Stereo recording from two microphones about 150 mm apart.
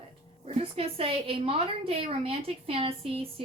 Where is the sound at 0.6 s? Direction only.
40° right (ahead or behind).